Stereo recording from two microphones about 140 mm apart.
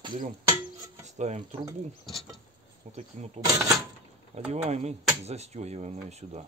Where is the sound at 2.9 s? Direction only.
55° right (ahead or behind).